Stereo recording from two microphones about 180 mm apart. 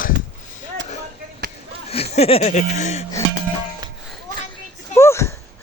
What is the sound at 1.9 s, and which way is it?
Speech, 35° left (ahead or behind).